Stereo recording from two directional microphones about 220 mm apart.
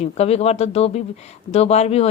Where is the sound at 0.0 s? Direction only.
30° left (ahead or behind).